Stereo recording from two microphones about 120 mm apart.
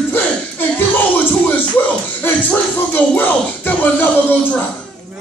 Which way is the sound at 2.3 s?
15° left (ahead or behind).